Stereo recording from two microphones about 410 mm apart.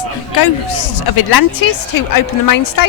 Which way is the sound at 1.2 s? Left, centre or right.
Left.